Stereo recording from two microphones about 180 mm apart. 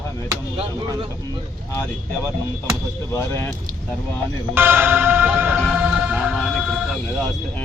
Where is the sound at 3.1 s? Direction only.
15° left (ahead or behind).